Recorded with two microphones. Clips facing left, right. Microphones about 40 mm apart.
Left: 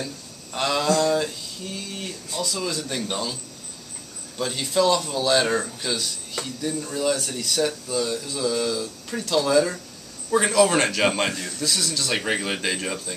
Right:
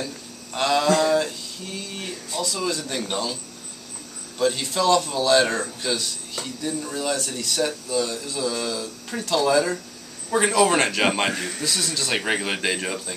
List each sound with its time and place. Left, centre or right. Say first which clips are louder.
0.0 s a sound: right 1 dB; centre
2.3 s speech: right 1 dB; centre
4.4 s speech: even; centre
11.3 s a man's voice: right 3 dB; right
11.6 s speech: left 3 dB; centre